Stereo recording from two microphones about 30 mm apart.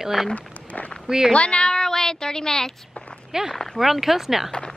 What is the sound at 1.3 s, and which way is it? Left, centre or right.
Speech, left.